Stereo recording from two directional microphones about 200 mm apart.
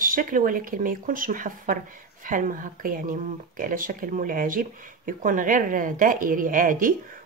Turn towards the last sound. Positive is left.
turn(degrees=-40)  # may be behind; listen again after turning